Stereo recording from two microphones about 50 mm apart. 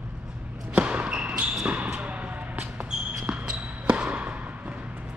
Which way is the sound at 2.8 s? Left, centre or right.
Centre.